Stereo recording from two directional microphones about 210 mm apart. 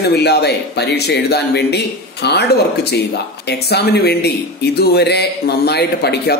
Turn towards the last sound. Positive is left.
turn(degrees=50)  # may be behind; listen again after turning